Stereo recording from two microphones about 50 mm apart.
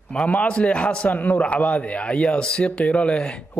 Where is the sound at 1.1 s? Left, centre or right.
Left.